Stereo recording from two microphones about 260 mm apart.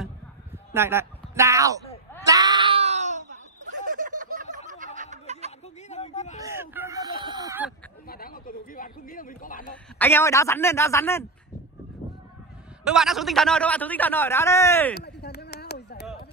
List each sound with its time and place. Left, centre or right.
0.7 s speech: centre
2.2 s screaming: centre; by 4.5 s right
4.6 s snicker: right
5.9 s a sound: left
6.4 s a sound: centre
8.1 s a man's voice: left
9.9 s a man's voice: centre
12.8 s a man's voice: centre
15.0 s a sound: left